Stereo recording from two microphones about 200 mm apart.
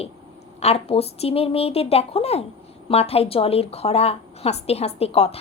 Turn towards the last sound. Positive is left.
turn(degrees=30)  # may be behind; listen again after turning